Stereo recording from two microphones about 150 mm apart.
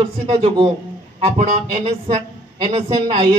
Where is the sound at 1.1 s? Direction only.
50° right (ahead or behind).